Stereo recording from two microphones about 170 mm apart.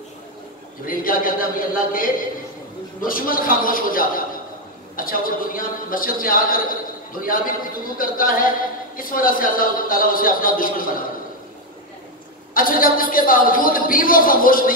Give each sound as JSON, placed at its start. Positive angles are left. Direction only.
{"t": 0.8, "sound": "a man's voice", "side_deg": 55}
{"t": 12.5, "sound": "a man's voice", "side_deg": 55}